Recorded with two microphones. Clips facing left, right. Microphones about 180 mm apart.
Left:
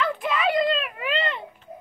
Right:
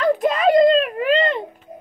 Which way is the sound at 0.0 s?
40° right (ahead or behind).